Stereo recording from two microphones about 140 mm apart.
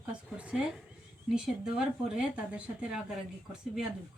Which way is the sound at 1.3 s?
5° right (ahead or behind).